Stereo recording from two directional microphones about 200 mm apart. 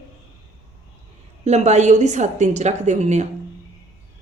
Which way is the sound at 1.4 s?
35° right (ahead or behind).